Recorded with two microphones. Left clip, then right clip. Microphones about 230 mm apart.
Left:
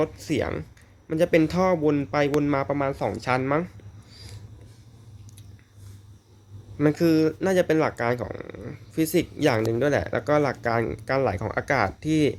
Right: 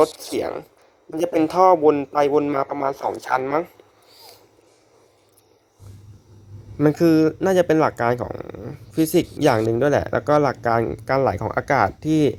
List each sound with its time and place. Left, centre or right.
0.0 s speech: centre
6.7 s speech: centre